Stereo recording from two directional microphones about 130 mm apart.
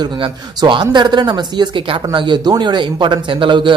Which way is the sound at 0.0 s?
35° right (ahead or behind).